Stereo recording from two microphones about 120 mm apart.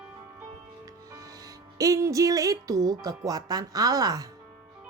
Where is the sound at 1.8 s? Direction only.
25° right (ahead or behind).